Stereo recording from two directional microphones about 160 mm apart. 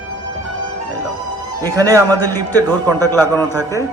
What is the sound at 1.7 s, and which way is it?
A man's voice, 20° right (ahead or behind).